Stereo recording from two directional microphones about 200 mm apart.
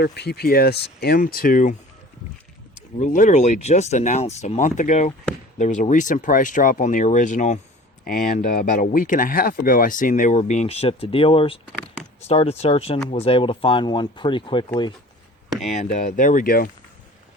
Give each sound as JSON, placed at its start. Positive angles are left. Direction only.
{"t": 0.0, "sound": "speech", "side_deg": 55}
{"t": 3.0, "sound": "speech", "side_deg": 40}
{"t": 15.7, "sound": "speech", "side_deg": 35}